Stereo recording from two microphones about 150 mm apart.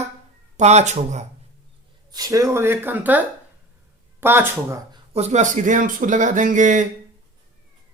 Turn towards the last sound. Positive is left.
turn(degrees=-55)  # may be behind; listen again after turning